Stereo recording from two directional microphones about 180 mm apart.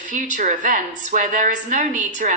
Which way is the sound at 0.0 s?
45° right (ahead or behind).